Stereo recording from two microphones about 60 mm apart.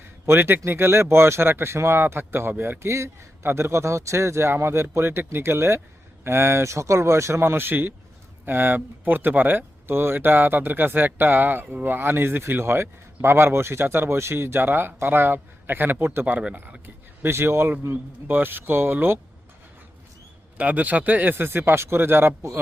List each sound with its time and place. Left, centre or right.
0.3 s speech: right
2.8 s speech: right
20.6 s speech: right